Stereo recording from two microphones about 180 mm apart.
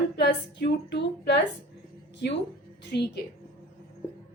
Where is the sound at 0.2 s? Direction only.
70° left (ahead or behind).